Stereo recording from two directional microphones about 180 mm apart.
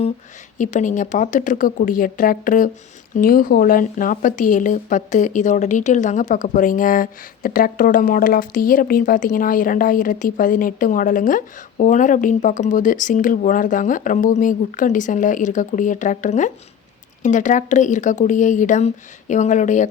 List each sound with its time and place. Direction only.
0.6 s speech: 45° left (ahead or behind)